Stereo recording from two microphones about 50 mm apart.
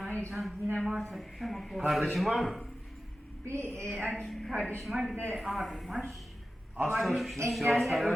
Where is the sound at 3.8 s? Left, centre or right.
Centre.